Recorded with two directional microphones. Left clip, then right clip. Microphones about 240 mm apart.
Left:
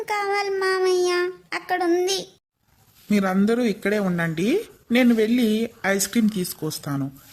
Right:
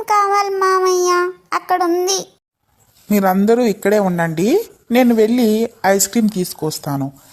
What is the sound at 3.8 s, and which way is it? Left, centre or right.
A woman's voice, centre.